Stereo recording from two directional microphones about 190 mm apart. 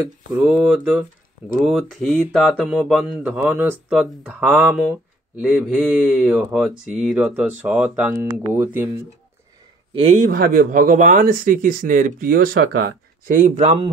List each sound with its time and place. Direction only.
0.0 s speech: 10° right (ahead or behind)
9.9 s a man's voice: 30° right (ahead or behind)
10.2 s speech: 50° right (ahead or behind)